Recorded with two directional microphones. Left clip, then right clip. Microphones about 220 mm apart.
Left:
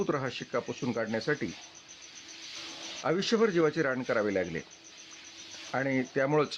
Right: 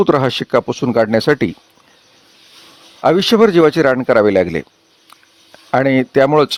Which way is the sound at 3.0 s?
45° right (ahead or behind).